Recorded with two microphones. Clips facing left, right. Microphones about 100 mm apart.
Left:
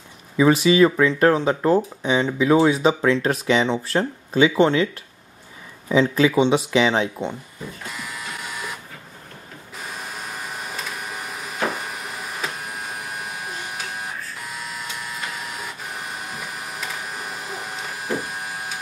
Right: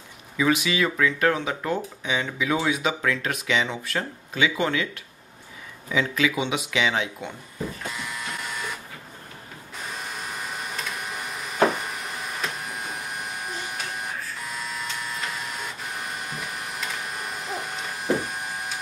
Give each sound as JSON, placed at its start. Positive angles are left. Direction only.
{"t": 0.4, "sound": "speech", "side_deg": 35}
{"t": 5.9, "sound": "speech", "side_deg": 35}
{"t": 7.9, "sound": "printer", "side_deg": 0}
{"t": 9.8, "sound": "printer", "side_deg": 0}
{"t": 14.4, "sound": "printer", "side_deg": 0}